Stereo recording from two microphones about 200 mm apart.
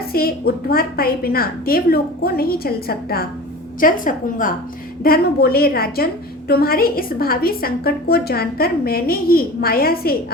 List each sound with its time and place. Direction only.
0.1 s a woman's voice: 50° left (ahead or behind)